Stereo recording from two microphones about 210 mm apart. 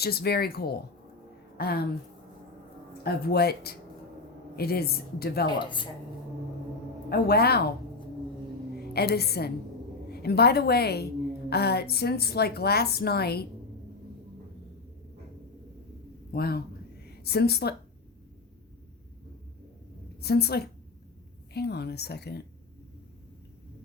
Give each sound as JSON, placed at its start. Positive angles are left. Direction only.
{"t": 0.0, "sound": "a woman's voice", "side_deg": 50}
{"t": 3.0, "sound": "a woman's voice", "side_deg": 50}
{"t": 5.5, "sound": "speech", "side_deg": 20}
{"t": 7.1, "sound": "a woman's voice", "side_deg": 50}
{"t": 8.9, "sound": "a woman's voice", "side_deg": 50}
{"t": 16.3, "sound": "a woman's voice", "side_deg": 45}
{"t": 20.2, "sound": "a woman's voice", "side_deg": 50}